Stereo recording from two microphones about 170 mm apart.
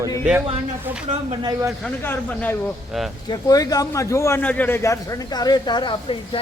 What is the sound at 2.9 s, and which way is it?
Speech, centre (ahead or behind).